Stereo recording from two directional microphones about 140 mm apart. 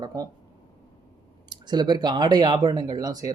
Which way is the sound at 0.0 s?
30° right (ahead or behind).